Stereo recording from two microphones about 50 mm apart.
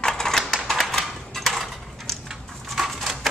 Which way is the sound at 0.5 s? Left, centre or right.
Centre.